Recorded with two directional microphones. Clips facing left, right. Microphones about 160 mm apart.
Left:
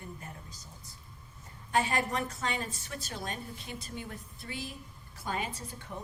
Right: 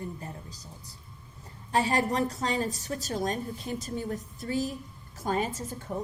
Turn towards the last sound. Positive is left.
turn(degrees=-40)  # may be behind; listen again after turning